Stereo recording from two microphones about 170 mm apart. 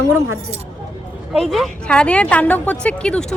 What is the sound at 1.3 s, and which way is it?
A woman's voice, centre (ahead or behind).